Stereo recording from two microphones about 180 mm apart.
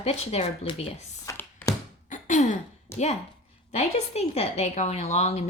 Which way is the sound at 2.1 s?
45° left (ahead or behind).